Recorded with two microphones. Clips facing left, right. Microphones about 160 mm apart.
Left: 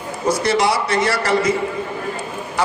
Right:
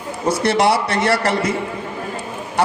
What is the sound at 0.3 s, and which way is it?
A man's voice, 60° right (ahead or behind).